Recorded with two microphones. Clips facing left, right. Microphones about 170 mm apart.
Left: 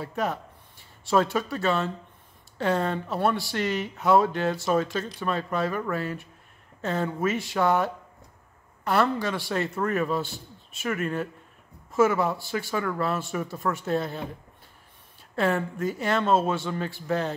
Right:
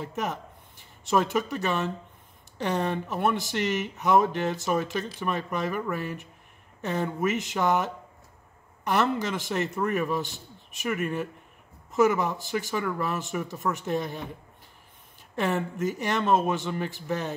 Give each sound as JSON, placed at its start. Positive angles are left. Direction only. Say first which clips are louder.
{"t": 0.0, "sound": "speech", "louder": "left 2 dB", "side_deg": -20}
{"t": 15.3, "sound": "speech", "louder": "left 2 dB", "side_deg": -20}